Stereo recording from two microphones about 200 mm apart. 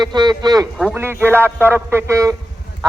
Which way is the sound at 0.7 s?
5° right (ahead or behind).